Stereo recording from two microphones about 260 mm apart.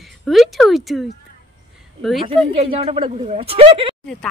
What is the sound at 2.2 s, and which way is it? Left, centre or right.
Speech, right.